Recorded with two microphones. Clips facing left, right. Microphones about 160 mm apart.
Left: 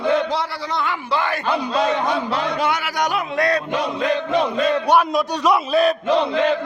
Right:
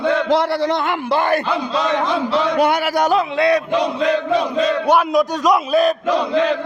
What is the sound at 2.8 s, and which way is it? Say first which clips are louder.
Speech: right 5 dB; 35° right (ahead or behind).